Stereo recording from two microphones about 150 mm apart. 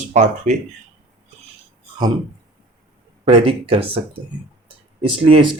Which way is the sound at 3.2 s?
40° right (ahead or behind).